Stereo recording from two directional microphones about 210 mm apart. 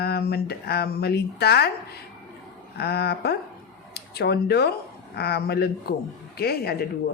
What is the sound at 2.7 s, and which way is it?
A woman's voice, 50° left (ahead or behind).